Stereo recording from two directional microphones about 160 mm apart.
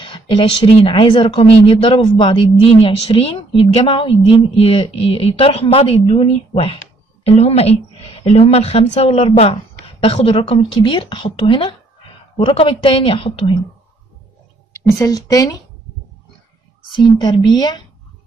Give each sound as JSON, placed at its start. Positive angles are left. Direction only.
{"t": 0.0, "sound": "a woman's voice", "side_deg": 30}
{"t": 14.7, "sound": "speech", "side_deg": 20}
{"t": 16.9, "sound": "speech", "side_deg": 30}